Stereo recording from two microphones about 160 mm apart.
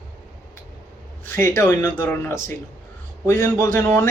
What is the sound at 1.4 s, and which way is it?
Speech, 15° left (ahead or behind).